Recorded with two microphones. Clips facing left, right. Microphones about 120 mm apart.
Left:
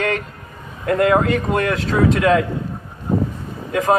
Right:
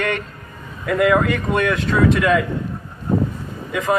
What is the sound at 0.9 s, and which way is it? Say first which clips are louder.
A man's voice: left 1 dB; 35° left (ahead or behind).